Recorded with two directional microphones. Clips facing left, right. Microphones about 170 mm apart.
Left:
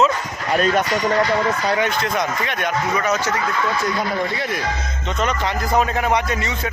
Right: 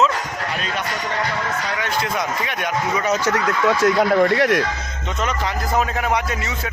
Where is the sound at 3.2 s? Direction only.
80° right.